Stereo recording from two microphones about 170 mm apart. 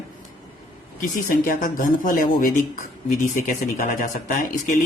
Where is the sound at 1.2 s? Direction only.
55° left (ahead or behind).